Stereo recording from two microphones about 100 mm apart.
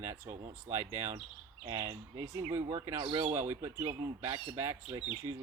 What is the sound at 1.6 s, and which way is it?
Speech, 40° right (ahead or behind).